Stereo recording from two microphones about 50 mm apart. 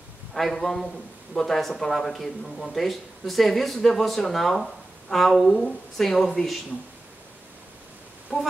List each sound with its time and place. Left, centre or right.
0.3 s a man's voice: centre
8.3 s speech: centre